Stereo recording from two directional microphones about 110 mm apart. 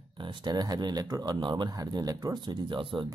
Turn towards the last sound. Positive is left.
turn(degrees=-45)  # may be behind; listen again after turning